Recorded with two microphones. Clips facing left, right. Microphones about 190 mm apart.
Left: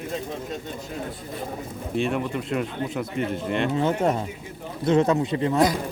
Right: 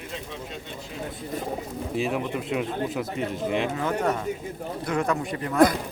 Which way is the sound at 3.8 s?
25° left (ahead or behind).